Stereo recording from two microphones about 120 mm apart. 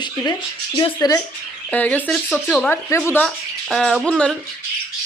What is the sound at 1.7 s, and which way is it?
Speech, 10° left (ahead or behind).